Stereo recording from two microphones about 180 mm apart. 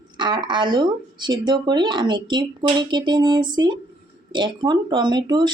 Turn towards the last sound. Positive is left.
turn(degrees=-25)  # may be behind; listen again after turning